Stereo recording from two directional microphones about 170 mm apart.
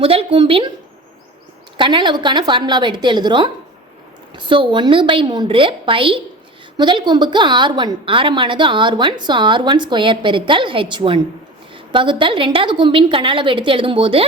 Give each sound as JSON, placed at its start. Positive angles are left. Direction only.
{"t": 0.0, "sound": "a woman's voice", "side_deg": -35}
{"t": 1.7, "sound": "a woman's voice", "side_deg": -30}